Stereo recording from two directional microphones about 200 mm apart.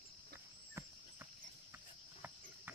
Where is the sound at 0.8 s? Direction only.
15° right (ahead or behind).